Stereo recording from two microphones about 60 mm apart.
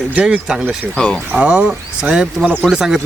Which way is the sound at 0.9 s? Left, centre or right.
Centre.